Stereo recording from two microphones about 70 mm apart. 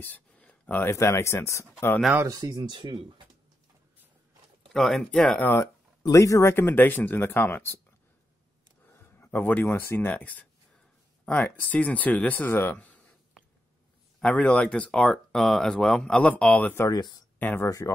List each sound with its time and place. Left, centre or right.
0.4 s a sound: centre
0.7 s speech: left
2.2 s speech: right
4.6 s speech: centre
6.1 s speech: left
9.2 s speech: left
14.2 s speech: centre
16.9 s speech: left
17.4 s speech: left
17.6 s speech: left